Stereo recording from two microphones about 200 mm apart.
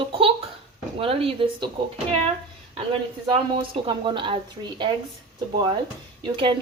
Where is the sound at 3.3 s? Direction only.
25° right (ahead or behind).